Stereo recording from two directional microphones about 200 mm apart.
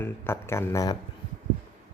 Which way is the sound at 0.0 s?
10° left (ahead or behind).